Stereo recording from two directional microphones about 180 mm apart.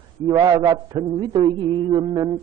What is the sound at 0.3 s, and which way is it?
Mantra, 20° right (ahead or behind).